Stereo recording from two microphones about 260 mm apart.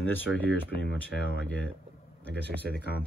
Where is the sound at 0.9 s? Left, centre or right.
Centre.